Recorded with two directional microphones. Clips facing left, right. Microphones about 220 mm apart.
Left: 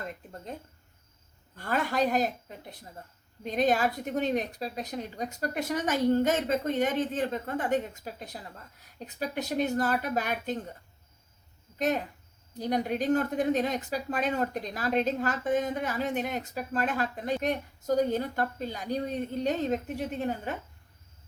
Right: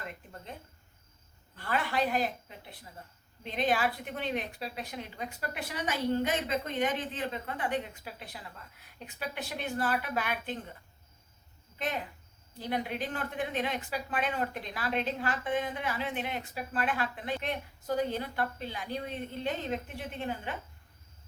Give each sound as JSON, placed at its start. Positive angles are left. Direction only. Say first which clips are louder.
{"t": 1.5, "sound": "a woman's voice", "louder": "left 3 dB", "side_deg": 45}
{"t": 11.8, "sound": "a woman's voice", "louder": "left 7 dB", "side_deg": 45}